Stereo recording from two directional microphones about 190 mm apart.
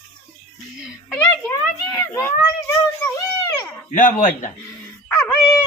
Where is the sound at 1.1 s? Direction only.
10° left (ahead or behind).